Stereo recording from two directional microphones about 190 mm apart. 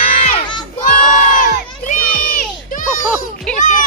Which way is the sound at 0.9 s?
45° left (ahead or behind).